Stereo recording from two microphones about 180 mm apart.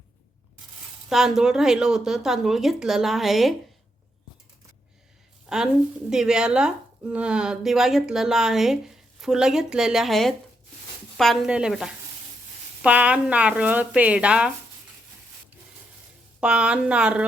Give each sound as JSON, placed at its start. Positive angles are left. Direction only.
{"t": 1.1, "sound": "speech", "side_deg": 0}
{"t": 5.5, "sound": "speech", "side_deg": -5}
{"t": 16.4, "sound": "speech", "side_deg": -5}